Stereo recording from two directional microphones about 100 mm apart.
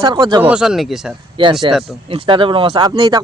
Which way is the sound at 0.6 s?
5° right (ahead or behind).